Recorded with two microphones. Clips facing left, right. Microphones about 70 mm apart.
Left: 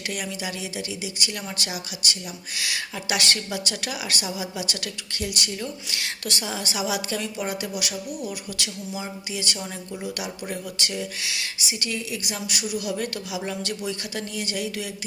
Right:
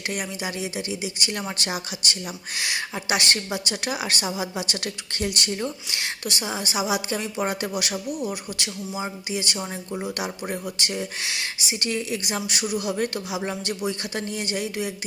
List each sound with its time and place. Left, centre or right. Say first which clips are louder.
0.1 s a woman's voice: right 1 dB; right